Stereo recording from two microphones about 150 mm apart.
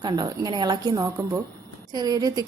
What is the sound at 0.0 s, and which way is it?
A woman's voice, 30° right (ahead or behind).